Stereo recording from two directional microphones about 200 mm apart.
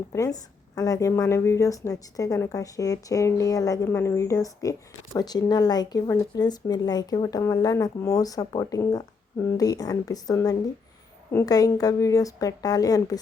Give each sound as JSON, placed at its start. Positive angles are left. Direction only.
{"t": 0.1, "sound": "a woman's voice", "side_deg": 15}